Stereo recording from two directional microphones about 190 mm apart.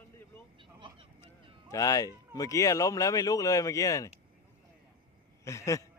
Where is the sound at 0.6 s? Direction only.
25° right (ahead or behind).